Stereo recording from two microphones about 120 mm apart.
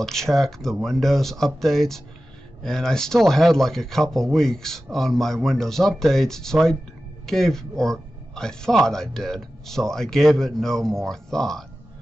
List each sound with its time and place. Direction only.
0.0 s a man's voice: 5° left (ahead or behind)